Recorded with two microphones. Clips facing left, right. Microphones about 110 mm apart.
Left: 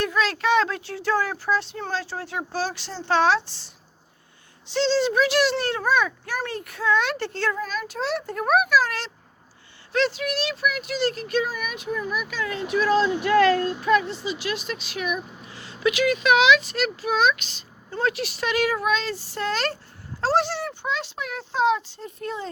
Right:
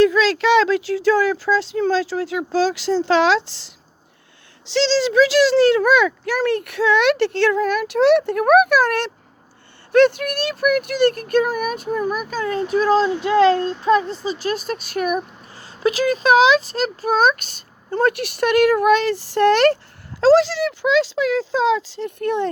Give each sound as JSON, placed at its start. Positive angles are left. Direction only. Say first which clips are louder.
{"t": 0.0, "sound": "a child's voice", "louder": "right 9 dB", "side_deg": -90}
{"t": 20.2, "sound": "speech", "louder": "right 9 dB", "side_deg": -90}